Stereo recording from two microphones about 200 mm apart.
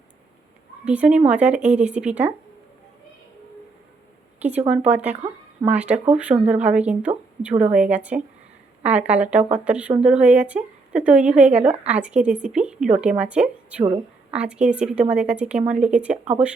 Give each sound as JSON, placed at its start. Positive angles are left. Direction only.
{"t": 0.9, "sound": "a woman's voice", "side_deg": -5}
{"t": 4.7, "sound": "a woman's voice", "side_deg": -5}
{"t": 13.8, "sound": "a woman's voice", "side_deg": -25}
{"t": 14.3, "sound": "a woman's voice", "side_deg": -5}